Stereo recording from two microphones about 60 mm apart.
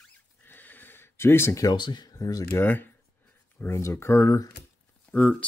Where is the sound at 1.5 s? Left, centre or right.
Left.